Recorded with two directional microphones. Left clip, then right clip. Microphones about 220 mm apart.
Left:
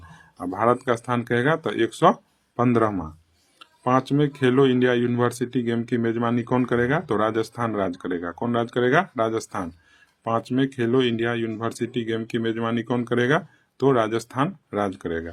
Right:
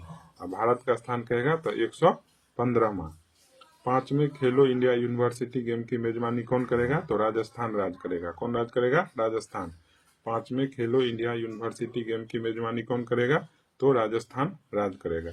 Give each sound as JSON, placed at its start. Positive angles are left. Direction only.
{"t": 0.3, "sound": "speech", "side_deg": 35}